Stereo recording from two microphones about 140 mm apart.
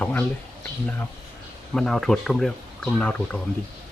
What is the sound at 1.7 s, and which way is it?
Speech, centre (ahead or behind).